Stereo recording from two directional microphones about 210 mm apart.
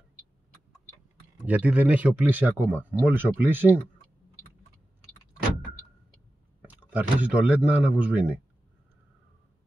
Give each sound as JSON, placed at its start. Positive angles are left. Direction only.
{"t": 1.4, "sound": "speech", "side_deg": -5}
{"t": 6.6, "sound": "speech", "side_deg": -10}